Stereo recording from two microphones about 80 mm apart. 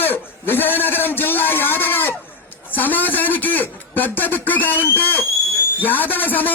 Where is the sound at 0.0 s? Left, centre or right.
Left.